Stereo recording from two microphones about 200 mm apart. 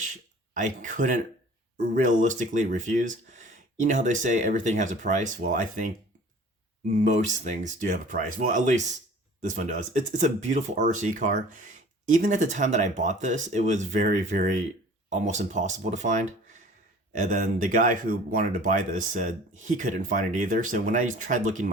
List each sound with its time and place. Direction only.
0.5 s speech: 40° right (ahead or behind)